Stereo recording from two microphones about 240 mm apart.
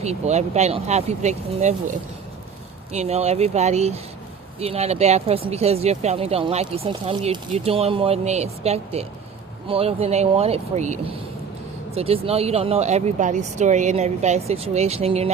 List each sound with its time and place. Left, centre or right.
0.0 s speech: right
2.9 s speech: right